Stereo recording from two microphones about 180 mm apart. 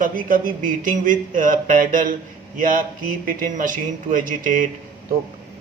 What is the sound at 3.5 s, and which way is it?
A man's voice, 45° right (ahead or behind).